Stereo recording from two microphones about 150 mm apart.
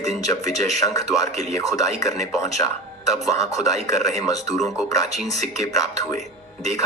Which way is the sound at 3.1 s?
25° left (ahead or behind).